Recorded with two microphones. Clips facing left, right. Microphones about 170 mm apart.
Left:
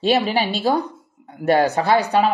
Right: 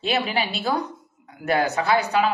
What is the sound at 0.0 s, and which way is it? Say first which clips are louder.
Speech: left 6 dB; 30° left (ahead or behind).